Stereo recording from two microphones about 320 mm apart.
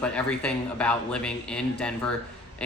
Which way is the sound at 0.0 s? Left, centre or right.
Centre.